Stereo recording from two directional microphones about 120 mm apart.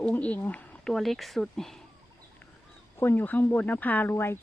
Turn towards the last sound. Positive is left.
turn(degrees=20)  # may be behind; listen again after turning